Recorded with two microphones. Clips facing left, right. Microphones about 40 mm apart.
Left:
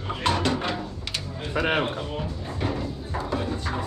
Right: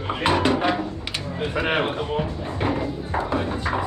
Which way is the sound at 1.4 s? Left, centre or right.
Centre.